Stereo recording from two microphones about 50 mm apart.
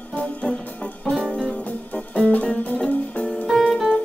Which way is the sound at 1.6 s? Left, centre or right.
Left.